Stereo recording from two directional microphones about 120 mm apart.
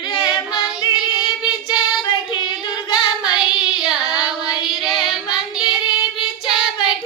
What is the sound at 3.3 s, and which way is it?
Child singing, 5° right (ahead or behind).